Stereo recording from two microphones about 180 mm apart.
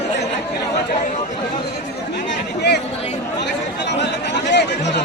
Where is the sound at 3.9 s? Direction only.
75° left (ahead or behind).